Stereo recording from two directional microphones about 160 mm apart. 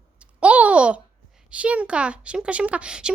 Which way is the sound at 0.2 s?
10° right (ahead or behind).